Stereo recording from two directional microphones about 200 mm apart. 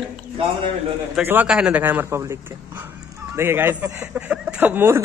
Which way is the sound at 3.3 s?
10° right (ahead or behind).